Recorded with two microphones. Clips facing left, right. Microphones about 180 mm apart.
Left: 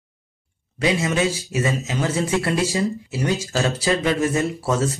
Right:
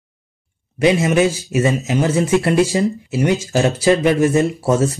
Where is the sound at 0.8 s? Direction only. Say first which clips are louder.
Right 6 dB; 20° right (ahead or behind).